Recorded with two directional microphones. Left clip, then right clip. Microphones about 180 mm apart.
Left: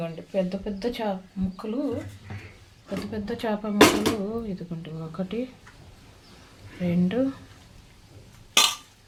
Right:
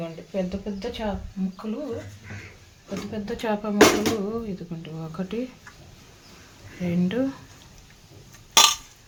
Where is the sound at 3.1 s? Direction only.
Centre (ahead or behind).